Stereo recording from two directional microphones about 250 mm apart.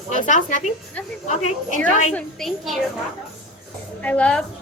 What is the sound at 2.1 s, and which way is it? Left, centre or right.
Speech, centre.